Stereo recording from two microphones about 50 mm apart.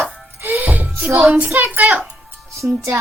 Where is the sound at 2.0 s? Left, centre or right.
Right.